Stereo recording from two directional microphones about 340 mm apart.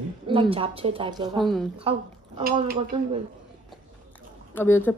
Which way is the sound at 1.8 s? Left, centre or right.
Centre.